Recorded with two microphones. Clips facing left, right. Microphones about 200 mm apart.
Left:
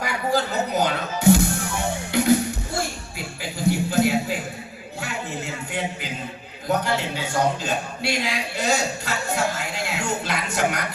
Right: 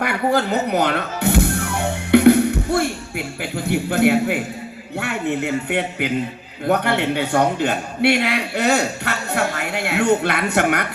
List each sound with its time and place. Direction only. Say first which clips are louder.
0.0 s music: right 5 dB; 60° right (ahead or behind)
3.7 s a man's voice: right 3 dB; 60° right (ahead or behind)